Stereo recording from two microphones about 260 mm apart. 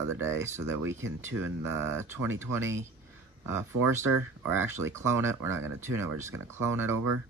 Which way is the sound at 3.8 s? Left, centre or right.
Right.